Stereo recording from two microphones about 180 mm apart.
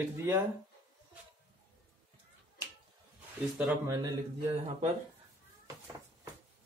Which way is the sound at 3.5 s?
5° right (ahead or behind).